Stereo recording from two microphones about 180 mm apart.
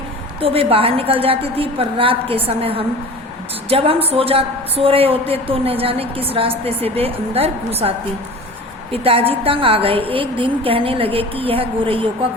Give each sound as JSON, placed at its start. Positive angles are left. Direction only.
{"t": 0.3, "sound": "a woman's voice", "side_deg": -30}